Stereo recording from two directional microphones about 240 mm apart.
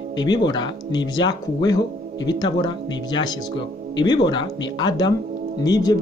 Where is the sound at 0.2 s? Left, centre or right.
Centre.